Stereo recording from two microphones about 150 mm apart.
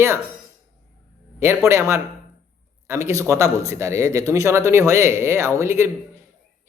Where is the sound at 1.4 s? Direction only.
15° right (ahead or behind).